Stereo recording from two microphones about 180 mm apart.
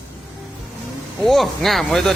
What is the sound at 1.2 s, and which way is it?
Speech, centre (ahead or behind).